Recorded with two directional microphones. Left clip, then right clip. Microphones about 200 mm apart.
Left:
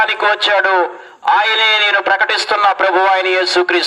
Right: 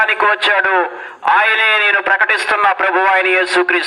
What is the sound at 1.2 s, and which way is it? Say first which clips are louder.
A man's voice: even; 25° left (ahead or behind).